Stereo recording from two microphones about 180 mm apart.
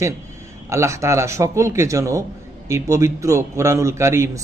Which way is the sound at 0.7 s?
15° right (ahead or behind).